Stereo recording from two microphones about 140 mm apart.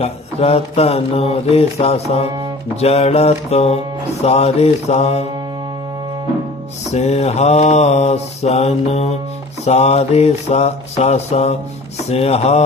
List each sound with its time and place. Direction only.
0.0 s music: 45° left (ahead or behind)
6.9 s music: 55° left (ahead or behind)